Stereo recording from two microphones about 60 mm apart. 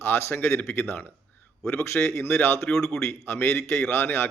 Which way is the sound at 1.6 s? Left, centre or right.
Left.